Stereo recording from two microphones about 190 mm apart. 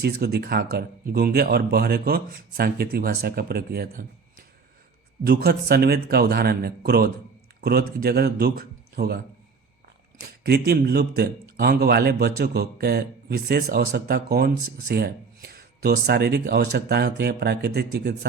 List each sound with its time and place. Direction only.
0.0 s speech: 55° right (ahead or behind)
10.4 s speech: 60° right (ahead or behind)